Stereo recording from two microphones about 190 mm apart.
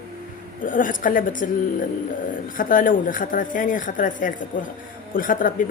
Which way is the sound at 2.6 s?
45° left (ahead or behind).